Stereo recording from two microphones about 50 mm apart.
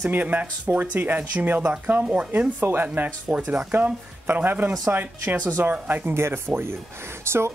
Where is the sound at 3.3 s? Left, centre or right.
Right.